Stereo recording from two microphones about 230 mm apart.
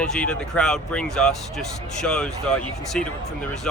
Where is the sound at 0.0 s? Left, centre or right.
Centre.